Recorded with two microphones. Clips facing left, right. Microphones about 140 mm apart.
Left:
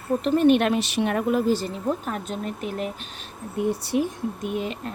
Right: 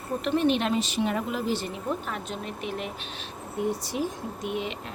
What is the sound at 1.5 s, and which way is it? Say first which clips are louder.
Speech: left 5 dB; 40° left (ahead or behind).